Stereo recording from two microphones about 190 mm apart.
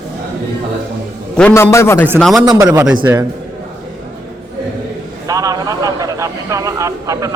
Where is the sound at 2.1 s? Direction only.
Centre (ahead or behind).